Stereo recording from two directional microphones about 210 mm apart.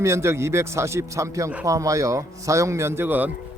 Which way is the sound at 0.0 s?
15° right (ahead or behind).